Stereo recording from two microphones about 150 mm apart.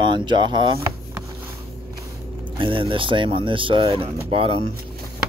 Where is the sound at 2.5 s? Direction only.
35° right (ahead or behind).